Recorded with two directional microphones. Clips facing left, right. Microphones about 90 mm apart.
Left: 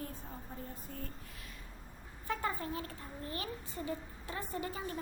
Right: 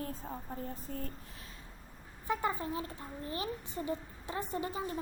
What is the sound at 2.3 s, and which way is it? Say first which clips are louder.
A child's voice: right 3 dB; 20° right (ahead or behind).